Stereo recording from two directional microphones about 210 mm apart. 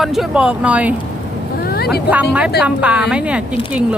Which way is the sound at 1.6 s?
50° left (ahead or behind).